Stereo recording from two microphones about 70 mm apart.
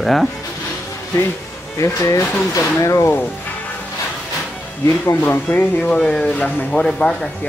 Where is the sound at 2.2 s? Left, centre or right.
Centre.